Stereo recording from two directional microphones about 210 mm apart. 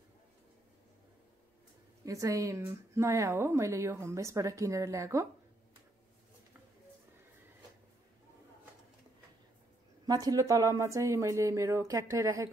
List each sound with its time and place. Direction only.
2.0 s a woman's voice: 15° right (ahead or behind)
10.0 s a woman's voice: 20° right (ahead or behind)